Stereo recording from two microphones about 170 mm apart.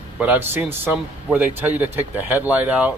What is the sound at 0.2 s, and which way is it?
A man's voice, 10° right (ahead or behind).